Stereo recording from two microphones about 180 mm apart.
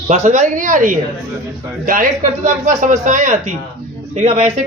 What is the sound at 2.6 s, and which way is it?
A man's voice, 45° right (ahead or behind).